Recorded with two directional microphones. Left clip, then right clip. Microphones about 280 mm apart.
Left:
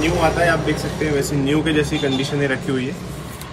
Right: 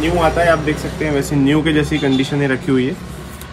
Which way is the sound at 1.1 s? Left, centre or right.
Right.